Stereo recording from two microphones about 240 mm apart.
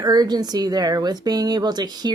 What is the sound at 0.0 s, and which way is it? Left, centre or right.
A woman's voice, centre.